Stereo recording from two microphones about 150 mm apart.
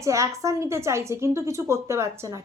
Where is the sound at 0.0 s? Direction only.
20° right (ahead or behind).